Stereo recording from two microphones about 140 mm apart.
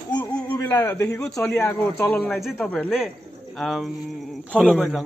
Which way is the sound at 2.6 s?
10° left (ahead or behind).